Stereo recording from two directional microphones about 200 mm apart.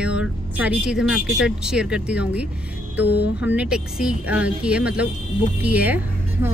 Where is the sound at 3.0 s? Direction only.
55° left (ahead or behind).